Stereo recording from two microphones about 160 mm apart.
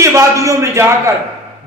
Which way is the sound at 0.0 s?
20° right (ahead or behind).